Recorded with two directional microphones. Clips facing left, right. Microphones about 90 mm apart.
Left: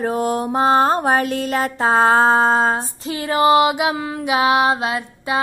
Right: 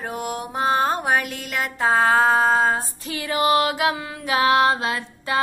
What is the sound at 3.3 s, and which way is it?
Mantra, 25° left (ahead or behind).